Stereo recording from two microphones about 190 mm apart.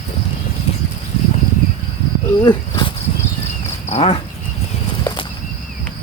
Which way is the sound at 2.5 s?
25° left (ahead or behind).